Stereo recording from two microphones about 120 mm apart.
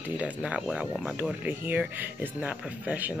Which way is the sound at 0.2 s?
10° right (ahead or behind).